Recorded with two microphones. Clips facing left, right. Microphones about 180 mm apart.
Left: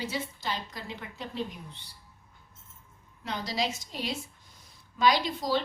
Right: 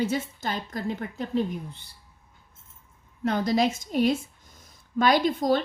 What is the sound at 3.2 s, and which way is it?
A woman's voice, 50° right (ahead or behind).